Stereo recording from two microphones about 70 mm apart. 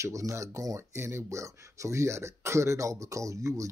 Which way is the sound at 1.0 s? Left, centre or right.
Right.